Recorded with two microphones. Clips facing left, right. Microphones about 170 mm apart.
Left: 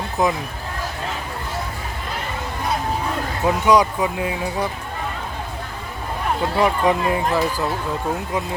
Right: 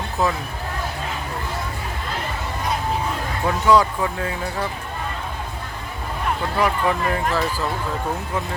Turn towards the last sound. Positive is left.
turn(degrees=15)  # may be behind; listen again after turning